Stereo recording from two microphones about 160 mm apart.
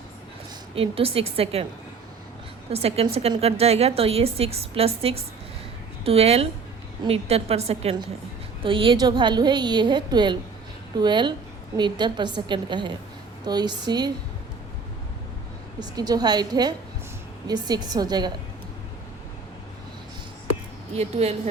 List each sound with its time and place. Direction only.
0.8 s a woman's voice: 35° right (ahead or behind)
2.6 s a woman's voice: 40° right (ahead or behind)
15.8 s a woman's voice: 25° right (ahead or behind)
20.9 s a woman's voice: 40° right (ahead or behind)